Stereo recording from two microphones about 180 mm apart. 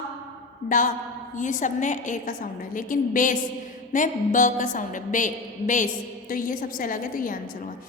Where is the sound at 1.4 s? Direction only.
45° left (ahead or behind).